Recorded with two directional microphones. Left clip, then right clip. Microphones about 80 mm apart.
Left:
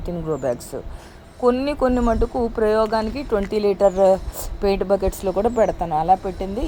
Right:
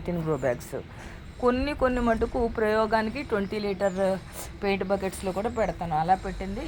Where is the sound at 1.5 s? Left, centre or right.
Left.